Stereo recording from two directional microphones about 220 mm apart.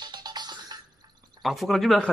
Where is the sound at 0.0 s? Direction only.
20° right (ahead or behind).